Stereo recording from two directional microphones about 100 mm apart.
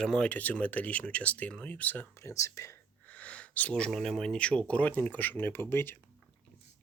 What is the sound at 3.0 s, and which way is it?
Speech, 15° left (ahead or behind).